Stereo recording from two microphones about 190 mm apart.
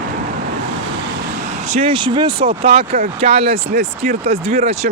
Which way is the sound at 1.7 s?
30° right (ahead or behind).